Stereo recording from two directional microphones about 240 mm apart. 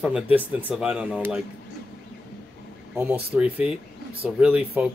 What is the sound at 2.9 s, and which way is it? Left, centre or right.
Speech, centre.